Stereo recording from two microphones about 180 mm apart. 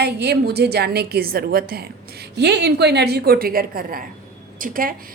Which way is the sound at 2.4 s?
65° right (ahead or behind).